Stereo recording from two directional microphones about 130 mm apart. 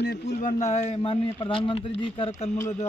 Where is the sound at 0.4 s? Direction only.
75° left (ahead or behind); by 2.3 s 45° left (ahead or behind).